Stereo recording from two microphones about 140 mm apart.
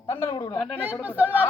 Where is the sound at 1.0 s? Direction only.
10° right (ahead or behind).